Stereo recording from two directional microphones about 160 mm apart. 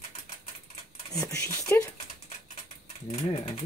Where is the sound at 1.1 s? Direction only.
20° left (ahead or behind).